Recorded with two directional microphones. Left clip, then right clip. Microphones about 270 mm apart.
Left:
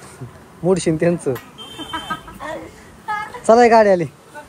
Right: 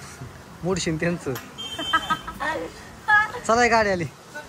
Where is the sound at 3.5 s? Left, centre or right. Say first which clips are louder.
Left 12 dB; centre.